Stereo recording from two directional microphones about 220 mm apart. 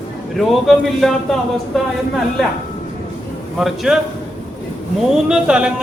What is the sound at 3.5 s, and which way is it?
Speech, centre (ahead or behind).